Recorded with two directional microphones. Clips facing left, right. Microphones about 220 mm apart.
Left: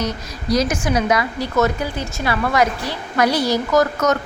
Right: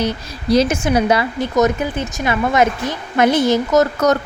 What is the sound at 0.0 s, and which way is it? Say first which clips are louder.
A woman's voice: right 4 dB; 30° right (ahead or behind).